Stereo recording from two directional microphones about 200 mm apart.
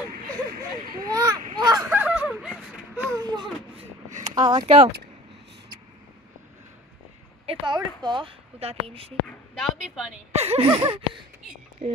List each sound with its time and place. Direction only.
0.9 s a sound: 20° right (ahead or behind)
1.9 s a sound: 5° right (ahead or behind)
3.2 s baby cry: 20° right (ahead or behind)
4.2 s speech: 20° right (ahead or behind)
7.4 s speech: 25° right (ahead or behind)
9.6 s a woman's voice: centre (ahead or behind)
10.3 s speech: 30° right (ahead or behind)